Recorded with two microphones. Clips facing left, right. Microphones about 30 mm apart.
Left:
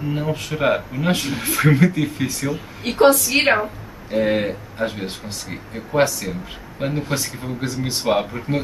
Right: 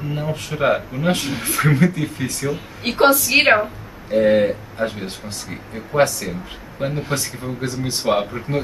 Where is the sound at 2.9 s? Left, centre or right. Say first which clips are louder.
Right 2 dB; right.